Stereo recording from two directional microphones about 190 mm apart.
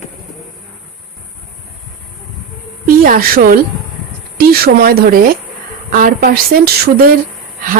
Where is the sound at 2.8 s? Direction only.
50° right (ahead or behind).